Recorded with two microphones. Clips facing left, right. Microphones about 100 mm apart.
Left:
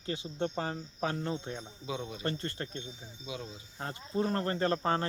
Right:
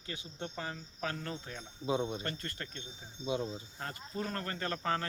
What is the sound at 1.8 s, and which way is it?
Speech, 30° right (ahead or behind).